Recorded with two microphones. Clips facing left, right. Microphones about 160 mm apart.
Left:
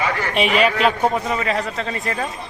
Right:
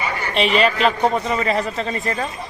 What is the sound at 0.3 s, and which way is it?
A man's voice, 10° left (ahead or behind).